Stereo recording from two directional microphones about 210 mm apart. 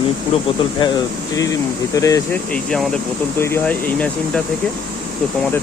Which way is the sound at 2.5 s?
5° left (ahead or behind).